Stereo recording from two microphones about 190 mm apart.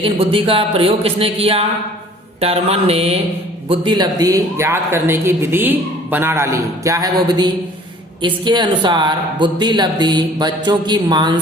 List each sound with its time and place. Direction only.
0.0 s speech: 30° right (ahead or behind)
2.4 s mantra: 30° right (ahead or behind)
3.7 s speech: 25° right (ahead or behind)